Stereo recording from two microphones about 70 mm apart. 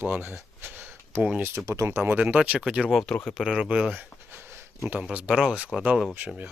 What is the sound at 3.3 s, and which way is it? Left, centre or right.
Speech, centre.